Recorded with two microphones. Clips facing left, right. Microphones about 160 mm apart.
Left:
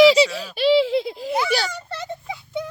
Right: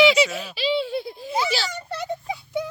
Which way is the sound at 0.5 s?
65° left (ahead or behind).